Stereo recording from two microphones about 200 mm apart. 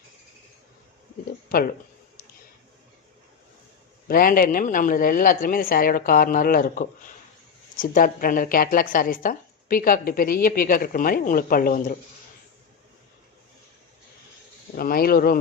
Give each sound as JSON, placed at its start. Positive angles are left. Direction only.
{"t": 1.5, "sound": "speech", "side_deg": 45}
{"t": 4.1, "sound": "a woman's voice", "side_deg": 45}
{"t": 14.8, "sound": "a woman's voice", "side_deg": 50}